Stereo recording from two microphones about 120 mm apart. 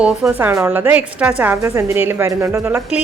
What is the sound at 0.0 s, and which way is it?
A woman's voice, 10° right (ahead or behind).